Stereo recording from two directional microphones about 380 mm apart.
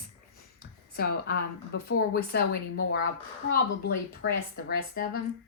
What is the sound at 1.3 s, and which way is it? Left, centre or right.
Speech, left.